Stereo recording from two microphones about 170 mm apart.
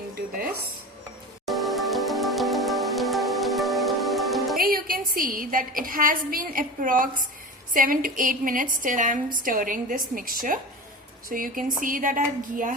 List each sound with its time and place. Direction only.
1.5 s music: centre (ahead or behind)
4.6 s a woman's voice: 55° right (ahead or behind)